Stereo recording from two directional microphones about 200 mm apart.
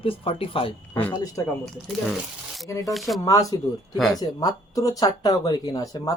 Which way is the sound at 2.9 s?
Centre (ahead or behind).